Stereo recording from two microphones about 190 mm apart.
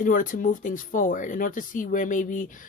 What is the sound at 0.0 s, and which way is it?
Speech, 45° left (ahead or behind).